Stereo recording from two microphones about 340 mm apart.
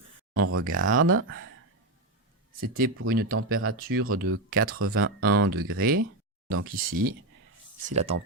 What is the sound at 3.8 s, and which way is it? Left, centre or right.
Speech, right.